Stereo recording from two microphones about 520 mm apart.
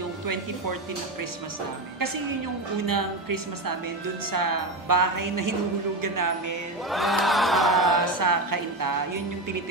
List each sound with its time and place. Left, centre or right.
2.9 s music: right
6.9 s crowd: centre
8.0 s music: right